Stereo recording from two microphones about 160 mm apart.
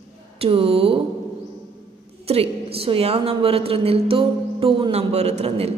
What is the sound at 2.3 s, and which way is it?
A woman's voice, 35° right (ahead or behind).